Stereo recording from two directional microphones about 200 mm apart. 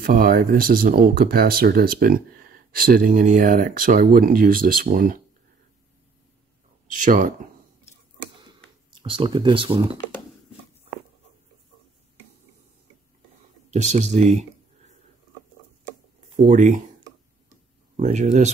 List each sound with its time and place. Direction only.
0.0 s speech: 45° right (ahead or behind)
6.9 s speech: 40° right (ahead or behind)
8.4 s a sound: 25° right (ahead or behind)
13.7 s speech: 35° right (ahead or behind)
16.4 s speech: 40° right (ahead or behind)
17.9 s speech: 35° right (ahead or behind)